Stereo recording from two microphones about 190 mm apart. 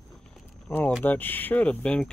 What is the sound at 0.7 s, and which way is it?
Speech, 10° left (ahead or behind).